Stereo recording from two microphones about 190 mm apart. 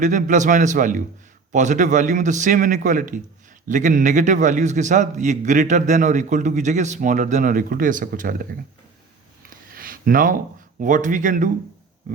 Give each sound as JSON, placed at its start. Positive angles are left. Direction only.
{"t": 0.0, "sound": "a man's voice", "side_deg": -40}
{"t": 9.5, "sound": "speech", "side_deg": -50}